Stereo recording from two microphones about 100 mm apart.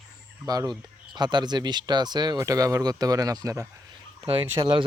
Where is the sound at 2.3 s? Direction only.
35° right (ahead or behind).